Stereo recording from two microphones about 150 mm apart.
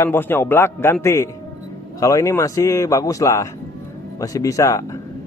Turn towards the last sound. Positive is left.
turn(degrees=20)  # may be behind; listen again after turning